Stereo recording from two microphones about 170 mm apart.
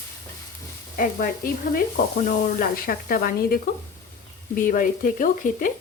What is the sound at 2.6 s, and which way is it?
Speech, 60° left (ahead or behind).